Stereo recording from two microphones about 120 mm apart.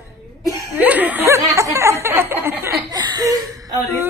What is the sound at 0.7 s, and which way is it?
Speech, 15° right (ahead or behind).